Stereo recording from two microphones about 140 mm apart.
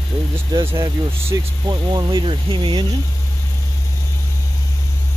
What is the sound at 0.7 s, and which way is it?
Speech, 15° right (ahead or behind).